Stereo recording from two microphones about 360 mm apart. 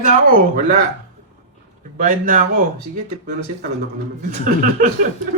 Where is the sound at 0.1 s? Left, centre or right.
Right.